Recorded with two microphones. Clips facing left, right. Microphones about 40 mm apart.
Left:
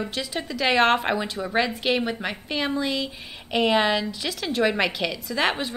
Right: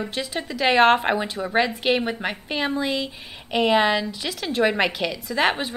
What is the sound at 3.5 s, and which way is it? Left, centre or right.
A woman's voice, centre.